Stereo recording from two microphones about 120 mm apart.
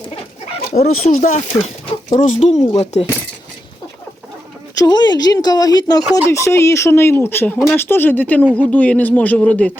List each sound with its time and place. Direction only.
0.7 s speech: 75° left (ahead or behind)
2.7 s speech: 65° left (ahead or behind)
4.8 s speech: 35° left (ahead or behind); by 9.7 s 10° left (ahead or behind)